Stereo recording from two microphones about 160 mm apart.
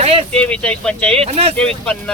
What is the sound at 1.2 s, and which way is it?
Speech, 40° right (ahead or behind).